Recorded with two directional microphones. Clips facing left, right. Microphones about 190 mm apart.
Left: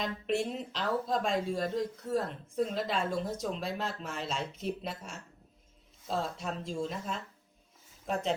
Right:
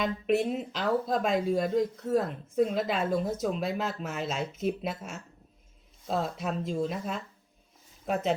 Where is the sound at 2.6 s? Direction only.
5° right (ahead or behind).